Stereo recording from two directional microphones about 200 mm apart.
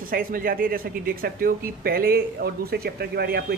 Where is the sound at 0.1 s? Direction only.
45° right (ahead or behind).